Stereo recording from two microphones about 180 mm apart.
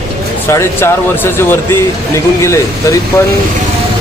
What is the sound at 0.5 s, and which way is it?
Speech, 10° left (ahead or behind).